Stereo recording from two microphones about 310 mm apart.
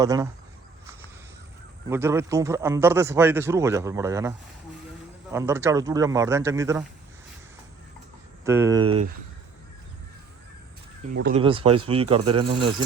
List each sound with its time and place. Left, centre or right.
0.0 s a man's voice: centre
1.9 s a man's voice: centre
8.4 s a man's voice: centre
11.3 s a man's voice: centre